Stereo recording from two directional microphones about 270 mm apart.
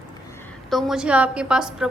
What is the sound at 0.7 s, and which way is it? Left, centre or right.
A woman's voice, centre.